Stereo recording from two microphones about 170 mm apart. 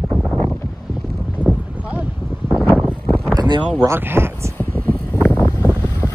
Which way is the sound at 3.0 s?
10° left (ahead or behind).